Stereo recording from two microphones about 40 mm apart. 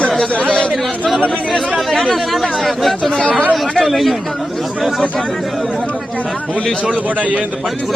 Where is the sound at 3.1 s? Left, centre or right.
Left.